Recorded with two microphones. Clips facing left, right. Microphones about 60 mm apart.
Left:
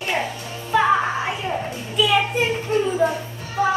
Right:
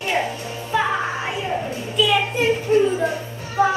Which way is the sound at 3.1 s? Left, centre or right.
Right.